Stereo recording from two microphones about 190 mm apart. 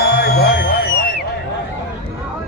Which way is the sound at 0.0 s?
60° left (ahead or behind).